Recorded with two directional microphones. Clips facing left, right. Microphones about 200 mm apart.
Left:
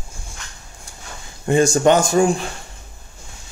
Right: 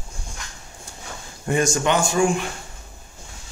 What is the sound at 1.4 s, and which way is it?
A man's voice, 30° left (ahead or behind).